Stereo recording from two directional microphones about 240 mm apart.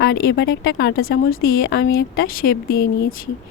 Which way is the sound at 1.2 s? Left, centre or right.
Left.